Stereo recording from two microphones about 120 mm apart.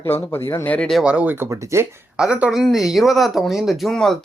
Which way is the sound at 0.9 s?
5° right (ahead or behind).